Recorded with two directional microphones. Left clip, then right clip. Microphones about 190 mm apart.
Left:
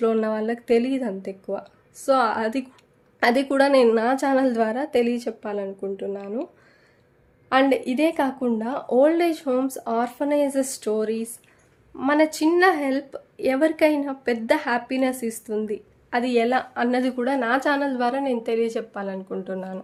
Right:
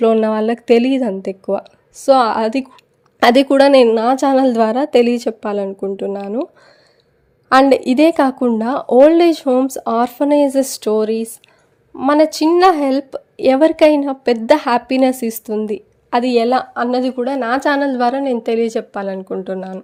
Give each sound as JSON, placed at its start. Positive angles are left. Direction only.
{"t": 0.0, "sound": "a woman's voice", "side_deg": -40}
{"t": 7.5, "sound": "a woman's voice", "side_deg": -40}